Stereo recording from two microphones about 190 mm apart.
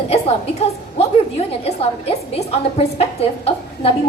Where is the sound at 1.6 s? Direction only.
30° left (ahead or behind).